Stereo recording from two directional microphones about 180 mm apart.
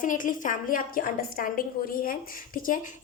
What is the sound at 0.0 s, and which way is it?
A woman's voice, 45° left (ahead or behind).